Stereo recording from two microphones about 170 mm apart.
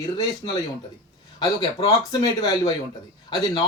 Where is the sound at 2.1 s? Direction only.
25° left (ahead or behind).